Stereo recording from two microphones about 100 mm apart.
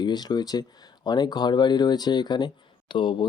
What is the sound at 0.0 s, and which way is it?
Speech, 45° left (ahead or behind).